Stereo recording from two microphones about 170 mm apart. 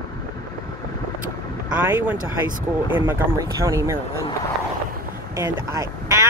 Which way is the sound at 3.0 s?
15° right (ahead or behind).